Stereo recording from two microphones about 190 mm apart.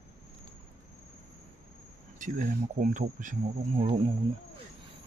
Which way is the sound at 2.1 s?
45° right (ahead or behind).